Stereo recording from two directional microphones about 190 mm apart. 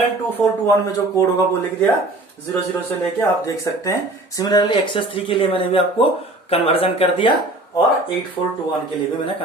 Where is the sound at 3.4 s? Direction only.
15° left (ahead or behind).